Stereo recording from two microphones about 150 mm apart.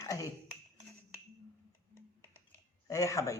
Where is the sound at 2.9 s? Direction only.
20° left (ahead or behind).